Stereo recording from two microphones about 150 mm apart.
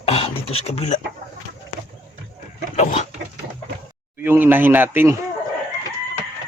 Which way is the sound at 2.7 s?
50° left (ahead or behind).